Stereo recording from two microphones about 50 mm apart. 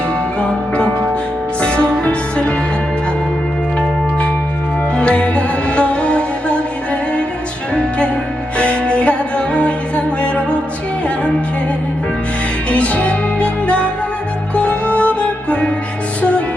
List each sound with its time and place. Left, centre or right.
1.6 s music: left
4.9 s music: left
7.7 s music: left
12.7 s music: left